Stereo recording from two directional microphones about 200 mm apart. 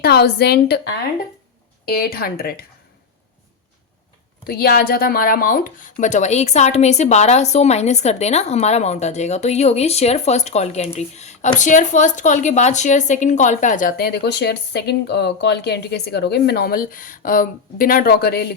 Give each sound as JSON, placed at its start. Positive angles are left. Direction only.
{"t": 0.0, "sound": "a woman's voice", "side_deg": 55}
{"t": 4.4, "sound": "a woman's voice", "side_deg": 50}